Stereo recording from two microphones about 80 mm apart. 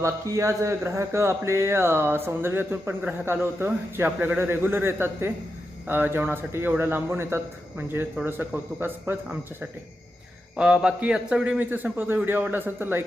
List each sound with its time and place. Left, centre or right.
0.0 s a man's voice: right
10.6 s a man's voice: centre